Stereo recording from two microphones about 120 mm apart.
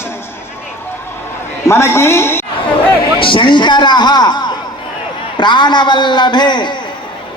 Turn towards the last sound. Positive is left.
turn(degrees=40)  # may be behind; listen again after turning